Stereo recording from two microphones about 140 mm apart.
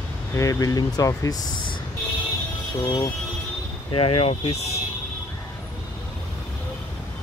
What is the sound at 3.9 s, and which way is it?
Speech, 40° left (ahead or behind).